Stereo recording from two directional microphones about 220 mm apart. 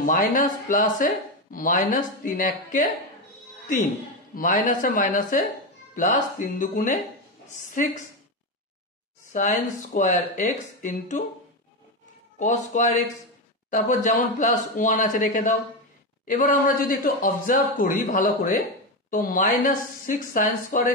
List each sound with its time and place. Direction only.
0.0 s speech: 35° left (ahead or behind)
4.4 s a woman's voice: 35° left (ahead or behind)
9.3 s speech: 35° left (ahead or behind)
12.4 s speech: 35° left (ahead or behind)